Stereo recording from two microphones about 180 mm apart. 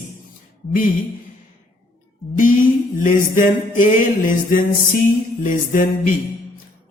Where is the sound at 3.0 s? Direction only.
45° left (ahead or behind).